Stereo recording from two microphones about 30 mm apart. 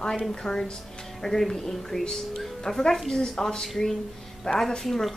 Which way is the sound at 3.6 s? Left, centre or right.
Centre.